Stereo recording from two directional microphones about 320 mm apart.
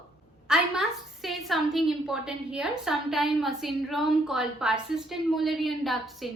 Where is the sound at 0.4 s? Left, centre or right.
Centre.